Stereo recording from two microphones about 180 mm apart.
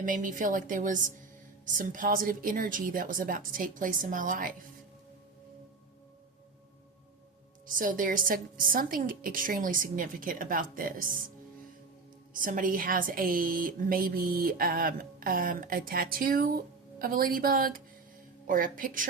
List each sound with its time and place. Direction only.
0.0 s a woman's voice: 45° right (ahead or behind)
7.7 s a woman's voice: 50° right (ahead or behind)
12.3 s a woman's voice: 50° right (ahead or behind)